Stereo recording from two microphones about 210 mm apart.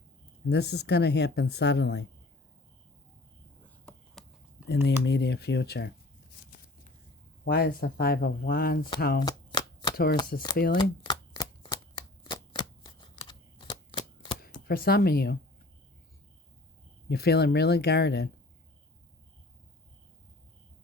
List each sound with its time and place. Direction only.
0.4 s speech: 50° left (ahead or behind)
3.6 s a sound: 10° left (ahead or behind)
4.7 s speech: 50° left (ahead or behind)
7.4 s speech: 45° left (ahead or behind)
9.2 s chopping: 20° left (ahead or behind)
10.8 s shuffling cards: 20° left (ahead or behind)
14.7 s speech: 45° left (ahead or behind)
17.1 s speech: 50° left (ahead or behind)